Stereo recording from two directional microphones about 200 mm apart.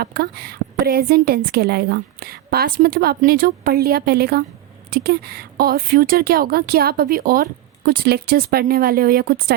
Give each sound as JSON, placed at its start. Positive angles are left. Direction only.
{"t": 0.0, "sound": "speech", "side_deg": -50}